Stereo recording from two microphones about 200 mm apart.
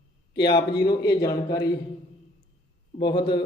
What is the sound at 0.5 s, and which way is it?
Speech, 55° left (ahead or behind).